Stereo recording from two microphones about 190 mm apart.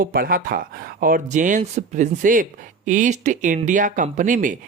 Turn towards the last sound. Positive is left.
turn(degrees=-45)  # may be behind; listen again after turning